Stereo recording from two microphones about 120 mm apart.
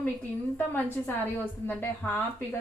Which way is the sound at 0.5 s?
15° left (ahead or behind).